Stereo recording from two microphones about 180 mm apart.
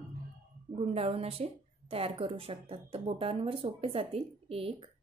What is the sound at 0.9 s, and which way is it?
A woman's voice, 35° right (ahead or behind).